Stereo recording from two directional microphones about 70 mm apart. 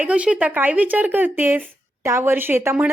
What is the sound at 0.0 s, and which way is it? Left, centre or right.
Speech, centre.